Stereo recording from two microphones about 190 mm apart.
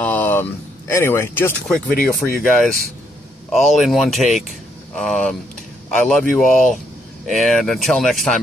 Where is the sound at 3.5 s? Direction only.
Centre (ahead or behind).